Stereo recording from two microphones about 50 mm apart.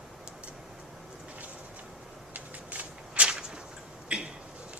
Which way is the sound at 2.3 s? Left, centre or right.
Right.